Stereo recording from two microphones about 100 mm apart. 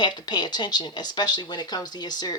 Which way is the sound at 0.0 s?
50° left (ahead or behind).